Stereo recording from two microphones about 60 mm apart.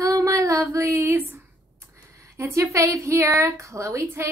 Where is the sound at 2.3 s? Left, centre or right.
Right.